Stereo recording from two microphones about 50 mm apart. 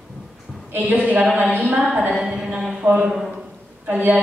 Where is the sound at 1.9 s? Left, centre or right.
Centre.